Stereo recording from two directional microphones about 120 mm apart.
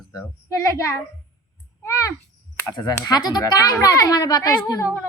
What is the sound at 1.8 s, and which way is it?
A child's voice, 25° left (ahead or behind).